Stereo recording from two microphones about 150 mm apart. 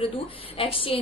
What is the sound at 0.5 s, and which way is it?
Speech, 40° left (ahead or behind).